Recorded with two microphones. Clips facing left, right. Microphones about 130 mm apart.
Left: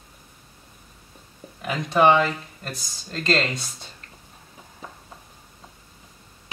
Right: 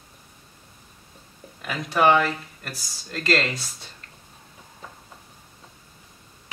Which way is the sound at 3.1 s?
25° left (ahead or behind).